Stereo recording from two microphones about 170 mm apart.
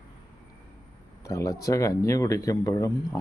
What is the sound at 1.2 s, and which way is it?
Speech, 20° left (ahead or behind).